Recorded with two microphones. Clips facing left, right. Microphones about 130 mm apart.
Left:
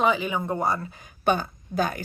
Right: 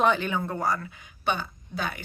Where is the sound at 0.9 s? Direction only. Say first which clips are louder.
Left 5 dB; 40° left (ahead or behind).